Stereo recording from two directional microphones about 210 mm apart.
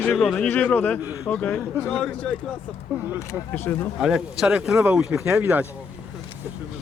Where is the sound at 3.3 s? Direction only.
10° left (ahead or behind).